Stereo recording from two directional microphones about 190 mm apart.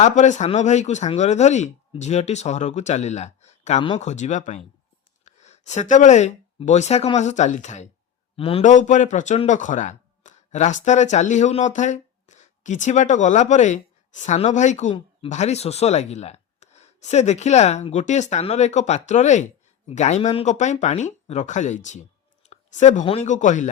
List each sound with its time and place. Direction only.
0.0 s a man's voice: 40° left (ahead or behind)
8.6 s speech: 40° left (ahead or behind)
22.4 s a sound: 40° left (ahead or behind)
23.0 s speech: 35° left (ahead or behind)